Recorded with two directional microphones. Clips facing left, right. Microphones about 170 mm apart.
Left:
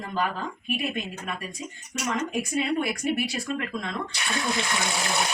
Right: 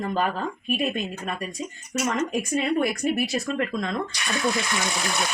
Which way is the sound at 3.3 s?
40° right (ahead or behind).